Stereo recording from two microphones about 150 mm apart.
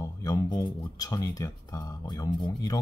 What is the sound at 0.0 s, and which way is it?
Speech, 25° left (ahead or behind).